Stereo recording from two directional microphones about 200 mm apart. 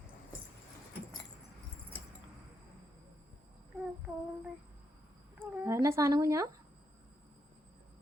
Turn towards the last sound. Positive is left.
turn(degrees=-15)  # may be behind; listen again after turning